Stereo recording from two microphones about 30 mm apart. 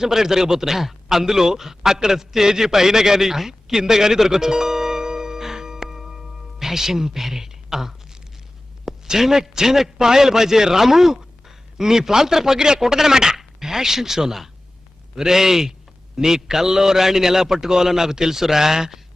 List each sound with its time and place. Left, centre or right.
0.0 s a man's voice: centre